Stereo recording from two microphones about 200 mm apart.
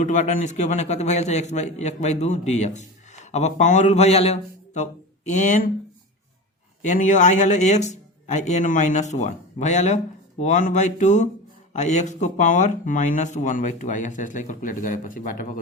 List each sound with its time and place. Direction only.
0.0 s a man's voice: 35° left (ahead or behind)
6.8 s a man's voice: 40° left (ahead or behind)